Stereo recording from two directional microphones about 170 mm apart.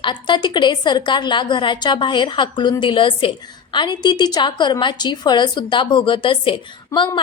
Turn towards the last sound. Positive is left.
turn(degrees=30)  # may be behind; listen again after turning